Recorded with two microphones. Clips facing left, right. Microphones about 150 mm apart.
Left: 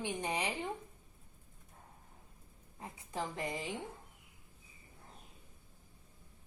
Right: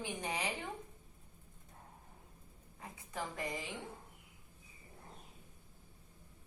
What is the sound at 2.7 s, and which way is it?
Speech, 25° left (ahead or behind).